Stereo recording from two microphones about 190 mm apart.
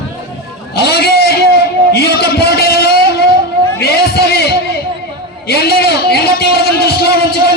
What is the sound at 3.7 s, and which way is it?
Music, 55° left (ahead or behind).